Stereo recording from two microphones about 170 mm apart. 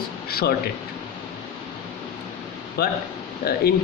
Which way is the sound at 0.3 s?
65° left (ahead or behind).